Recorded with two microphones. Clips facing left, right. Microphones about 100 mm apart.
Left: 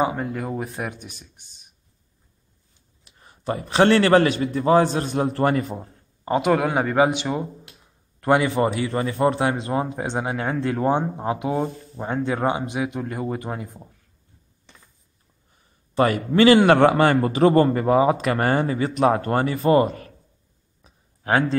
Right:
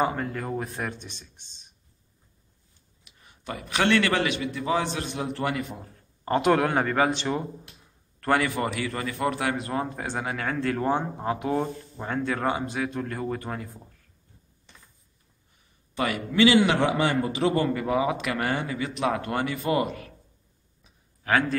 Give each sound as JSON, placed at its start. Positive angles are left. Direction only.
{"t": 0.0, "sound": "speech", "side_deg": 10}
{"t": 3.0, "sound": "a man's voice", "side_deg": 35}
{"t": 6.2, "sound": "speech", "side_deg": 5}
{"t": 8.2, "sound": "a man's voice", "side_deg": 20}
{"t": 15.9, "sound": "a man's voice", "side_deg": 40}
{"t": 20.8, "sound": "a sound", "side_deg": 30}